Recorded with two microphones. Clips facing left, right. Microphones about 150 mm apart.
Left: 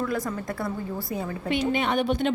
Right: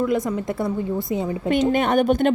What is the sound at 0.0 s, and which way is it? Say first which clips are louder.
A woman's voice: right 6 dB; 20° right (ahead or behind).